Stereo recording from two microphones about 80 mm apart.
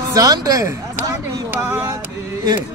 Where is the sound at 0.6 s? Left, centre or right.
Right.